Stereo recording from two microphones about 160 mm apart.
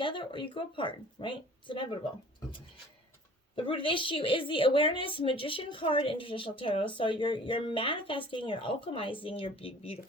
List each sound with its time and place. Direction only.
0.0 s a woman's voice: 30° left (ahead or behind)
3.5 s a woman's voice: 35° left (ahead or behind)